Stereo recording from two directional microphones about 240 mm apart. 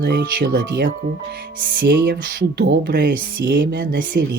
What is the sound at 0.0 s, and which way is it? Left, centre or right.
Speech, right.